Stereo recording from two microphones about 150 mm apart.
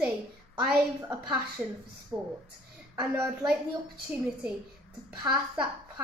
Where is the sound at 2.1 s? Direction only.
15° right (ahead or behind).